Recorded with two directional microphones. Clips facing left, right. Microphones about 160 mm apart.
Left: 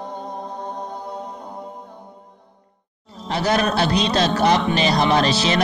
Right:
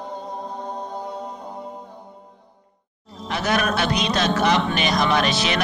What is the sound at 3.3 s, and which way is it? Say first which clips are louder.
Speech: left 3 dB; 35° left (ahead or behind).